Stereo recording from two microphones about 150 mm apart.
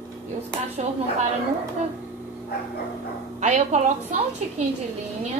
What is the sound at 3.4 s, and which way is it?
Speech, 50° right (ahead or behind).